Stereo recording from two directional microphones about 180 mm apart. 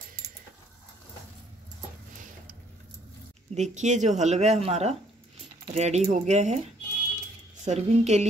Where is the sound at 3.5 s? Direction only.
40° right (ahead or behind).